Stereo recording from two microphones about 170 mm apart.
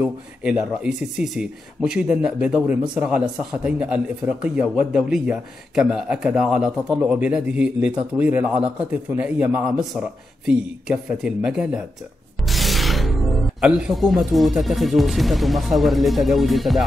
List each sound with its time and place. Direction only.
0.0 s speech: 5° right (ahead or behind)